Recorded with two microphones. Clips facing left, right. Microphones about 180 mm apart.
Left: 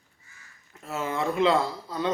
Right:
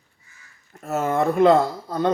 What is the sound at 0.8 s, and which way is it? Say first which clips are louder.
Speech: right 7 dB; 50° right (ahead or behind).